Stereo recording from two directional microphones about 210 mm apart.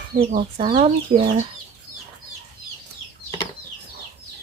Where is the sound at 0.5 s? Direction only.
25° right (ahead or behind).